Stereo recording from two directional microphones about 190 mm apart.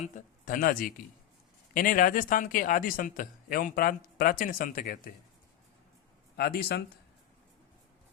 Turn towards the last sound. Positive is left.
turn(degrees=55)  # may be behind; listen again after turning